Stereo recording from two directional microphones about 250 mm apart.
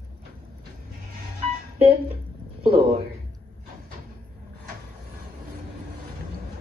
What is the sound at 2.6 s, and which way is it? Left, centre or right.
Speech, right.